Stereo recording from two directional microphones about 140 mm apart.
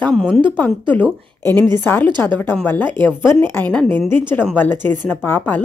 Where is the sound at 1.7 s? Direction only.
15° left (ahead or behind).